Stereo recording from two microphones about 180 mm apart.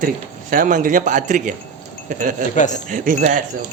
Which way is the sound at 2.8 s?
45° right (ahead or behind).